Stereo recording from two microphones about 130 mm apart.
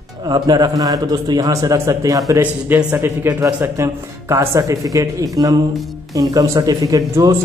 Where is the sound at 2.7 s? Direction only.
15° right (ahead or behind).